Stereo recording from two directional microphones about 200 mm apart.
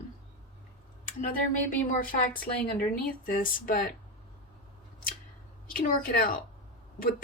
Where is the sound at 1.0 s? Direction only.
40° left (ahead or behind).